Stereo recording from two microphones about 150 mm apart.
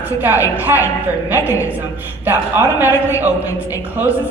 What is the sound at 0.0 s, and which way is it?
A woman's voice, 10° right (ahead or behind).